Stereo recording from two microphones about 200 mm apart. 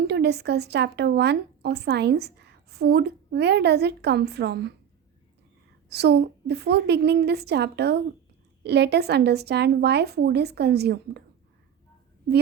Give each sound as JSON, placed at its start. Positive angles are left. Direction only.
{"t": 0.0, "sound": "speech", "side_deg": -55}
{"t": 5.9, "sound": "speech", "side_deg": -55}